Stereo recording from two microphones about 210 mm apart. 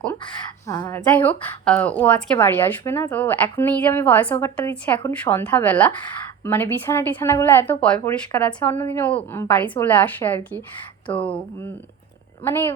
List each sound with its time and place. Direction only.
0.7 s a woman's voice: 15° left (ahead or behind)
11.1 s a sound: 25° left (ahead or behind)
12.5 s a woman's voice: 10° left (ahead or behind)